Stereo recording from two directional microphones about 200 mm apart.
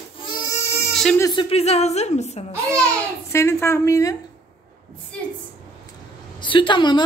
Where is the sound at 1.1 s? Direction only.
20° left (ahead or behind); by 2.4 s 35° left (ahead or behind).